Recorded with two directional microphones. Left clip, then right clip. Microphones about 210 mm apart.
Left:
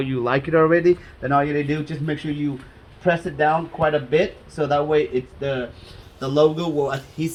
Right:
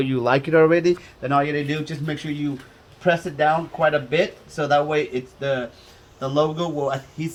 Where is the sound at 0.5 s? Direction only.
45° right (ahead or behind).